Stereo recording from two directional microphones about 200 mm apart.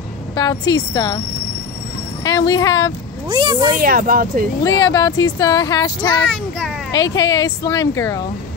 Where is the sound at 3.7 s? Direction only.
45° right (ahead or behind).